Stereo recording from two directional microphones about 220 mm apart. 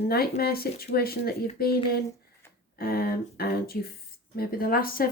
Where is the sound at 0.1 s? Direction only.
45° left (ahead or behind).